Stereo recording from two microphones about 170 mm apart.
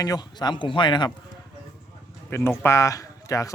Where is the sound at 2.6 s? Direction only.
15° left (ahead or behind).